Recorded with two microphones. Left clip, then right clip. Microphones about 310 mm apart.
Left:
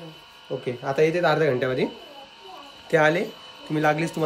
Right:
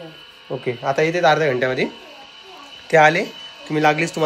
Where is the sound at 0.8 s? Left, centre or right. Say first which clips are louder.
Right 4 dB; centre.